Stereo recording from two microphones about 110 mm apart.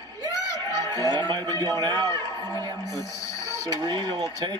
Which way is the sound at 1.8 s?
35° right (ahead or behind).